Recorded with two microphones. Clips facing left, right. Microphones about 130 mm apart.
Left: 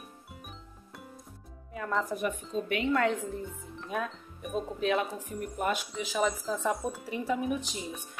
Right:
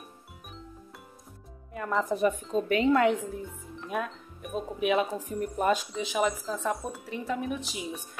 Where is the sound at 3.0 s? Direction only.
15° right (ahead or behind).